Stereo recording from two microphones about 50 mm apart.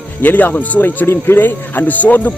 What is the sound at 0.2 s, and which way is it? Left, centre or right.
Speech, left.